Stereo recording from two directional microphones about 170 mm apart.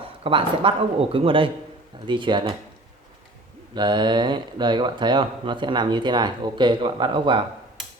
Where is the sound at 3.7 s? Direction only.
25° right (ahead or behind).